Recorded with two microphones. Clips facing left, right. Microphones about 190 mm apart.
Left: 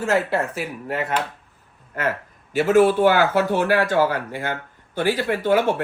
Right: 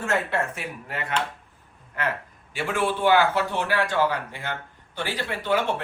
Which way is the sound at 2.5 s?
45° left (ahead or behind).